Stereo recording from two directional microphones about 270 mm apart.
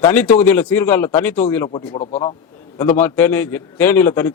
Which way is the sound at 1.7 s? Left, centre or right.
Left.